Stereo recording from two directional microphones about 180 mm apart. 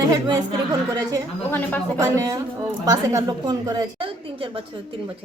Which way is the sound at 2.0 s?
20° right (ahead or behind).